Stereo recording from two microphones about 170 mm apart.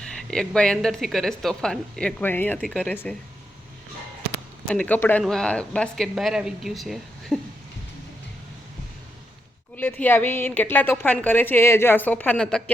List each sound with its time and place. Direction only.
0.2 s a woman's voice: 5° left (ahead or behind)
4.7 s a woman's voice: 10° left (ahead or behind)
9.7 s a woman's voice: 10° left (ahead or behind)